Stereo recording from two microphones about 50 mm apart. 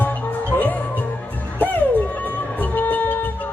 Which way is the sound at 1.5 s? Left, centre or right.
Left.